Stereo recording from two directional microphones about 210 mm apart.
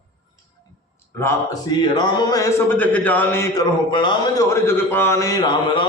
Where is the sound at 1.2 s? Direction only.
15° left (ahead or behind).